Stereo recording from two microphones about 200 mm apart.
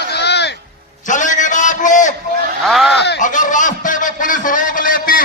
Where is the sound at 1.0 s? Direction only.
40° left (ahead or behind).